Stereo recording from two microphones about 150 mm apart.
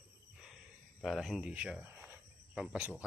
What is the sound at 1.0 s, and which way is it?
Speech, centre (ahead or behind).